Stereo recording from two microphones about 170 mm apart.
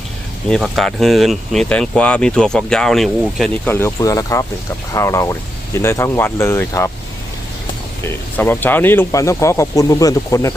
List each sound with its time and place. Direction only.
0.5 s speech: centre (ahead or behind)
3.7 s speech: 15° left (ahead or behind)
8.0 s speech: 10° left (ahead or behind)